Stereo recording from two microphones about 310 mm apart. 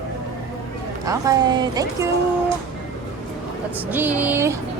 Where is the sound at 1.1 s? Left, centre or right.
Centre.